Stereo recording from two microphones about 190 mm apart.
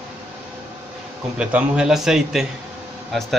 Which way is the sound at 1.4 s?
5° right (ahead or behind).